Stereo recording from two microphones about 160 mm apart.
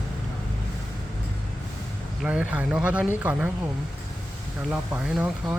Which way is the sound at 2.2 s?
10° right (ahead or behind).